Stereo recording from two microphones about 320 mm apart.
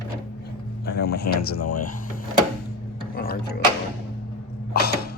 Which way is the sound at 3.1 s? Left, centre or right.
Left.